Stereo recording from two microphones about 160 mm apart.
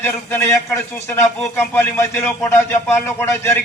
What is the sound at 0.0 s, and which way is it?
A man's voice, 15° left (ahead or behind).